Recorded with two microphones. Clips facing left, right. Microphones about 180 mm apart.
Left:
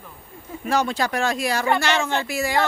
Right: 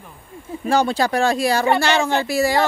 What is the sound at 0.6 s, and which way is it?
Speech, 30° right (ahead or behind).